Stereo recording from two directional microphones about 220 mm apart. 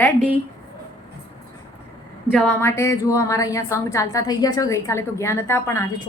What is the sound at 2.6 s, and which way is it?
A woman's voice, 10° left (ahead or behind).